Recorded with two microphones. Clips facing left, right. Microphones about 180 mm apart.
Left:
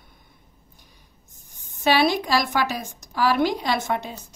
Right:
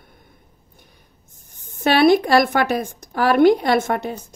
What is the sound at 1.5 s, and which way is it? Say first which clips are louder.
Speech: right 2 dB; 55° right (ahead or behind).